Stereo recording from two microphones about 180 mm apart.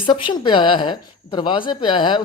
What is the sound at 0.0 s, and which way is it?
A man's voice, 25° left (ahead or behind).